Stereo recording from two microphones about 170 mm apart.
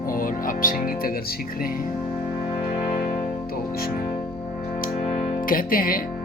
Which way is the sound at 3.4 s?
60° left (ahead or behind).